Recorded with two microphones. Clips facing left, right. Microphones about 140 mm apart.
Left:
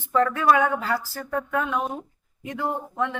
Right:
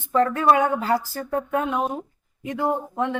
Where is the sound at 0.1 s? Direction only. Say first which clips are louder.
Right 1 dB; 30° right (ahead or behind).